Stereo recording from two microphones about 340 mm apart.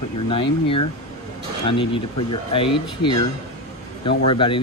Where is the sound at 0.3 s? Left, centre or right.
Centre.